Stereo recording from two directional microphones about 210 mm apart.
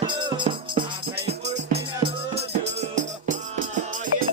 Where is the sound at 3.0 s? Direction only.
35° right (ahead or behind).